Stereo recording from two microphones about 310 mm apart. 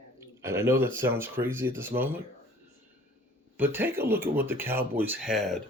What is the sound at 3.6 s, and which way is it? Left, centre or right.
Speech, centre.